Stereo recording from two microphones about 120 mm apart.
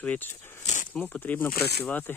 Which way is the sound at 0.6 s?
85° left.